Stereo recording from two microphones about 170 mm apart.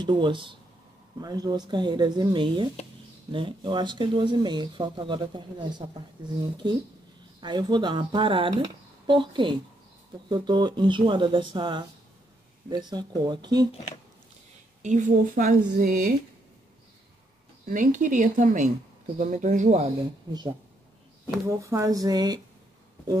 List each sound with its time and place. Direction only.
0.0 s speech: 25° right (ahead or behind)
7.3 s speech: 25° right (ahead or behind)
14.8 s a woman's voice: 45° right (ahead or behind)
17.6 s a woman's voice: 50° right (ahead or behind)
21.5 s speech: 20° right (ahead or behind)